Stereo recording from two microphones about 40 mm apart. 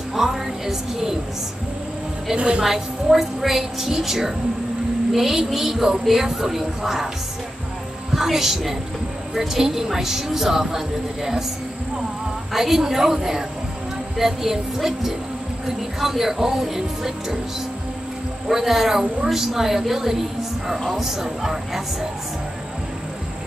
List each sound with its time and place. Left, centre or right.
0.1 s a woman's voice: centre
2.3 s a woman's voice: right
2.6 s a woman's voice: centre
8.1 s a woman's voice: centre
12.5 s a woman's voice: centre
18.5 s a woman's voice: centre